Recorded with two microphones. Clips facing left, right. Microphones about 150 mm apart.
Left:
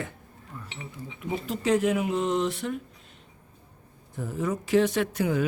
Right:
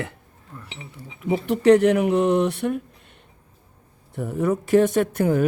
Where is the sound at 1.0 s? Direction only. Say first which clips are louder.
Right 8 dB; 70° right (ahead or behind).